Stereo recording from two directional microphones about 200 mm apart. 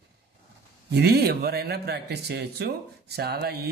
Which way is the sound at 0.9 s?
55° right (ahead or behind).